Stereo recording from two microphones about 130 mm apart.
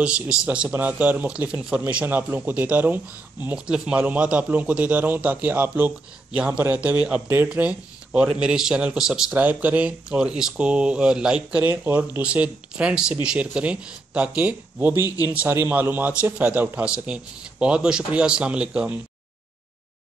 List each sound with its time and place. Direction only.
0.0 s a man's voice: 10° right (ahead or behind)
15.0 s a man's voice: 30° left (ahead or behind)
15.3 s a man's voice: 15° right (ahead or behind)